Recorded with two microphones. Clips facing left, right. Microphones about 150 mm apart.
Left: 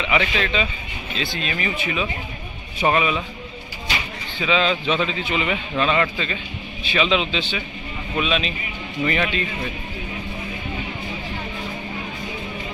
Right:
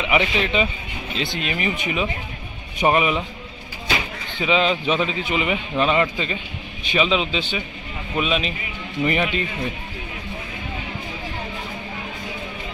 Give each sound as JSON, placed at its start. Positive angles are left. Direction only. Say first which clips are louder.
{"t": 0.0, "sound": "a man's voice", "louder": "right 1 dB", "side_deg": -15}
{"t": 4.4, "sound": "a man's voice", "louder": "right 1 dB", "side_deg": -15}